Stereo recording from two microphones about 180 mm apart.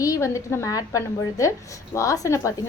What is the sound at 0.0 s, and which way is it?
A woman's voice, 20° left (ahead or behind).